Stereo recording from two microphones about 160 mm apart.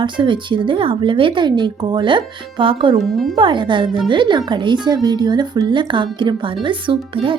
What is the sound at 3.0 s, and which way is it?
Speech, centre (ahead or behind).